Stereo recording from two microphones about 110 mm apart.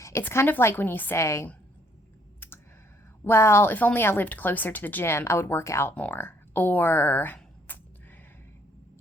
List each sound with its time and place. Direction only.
0.0 s speech: 20° left (ahead or behind)
3.2 s speech: 20° left (ahead or behind)
7.7 s neigh: 15° left (ahead or behind)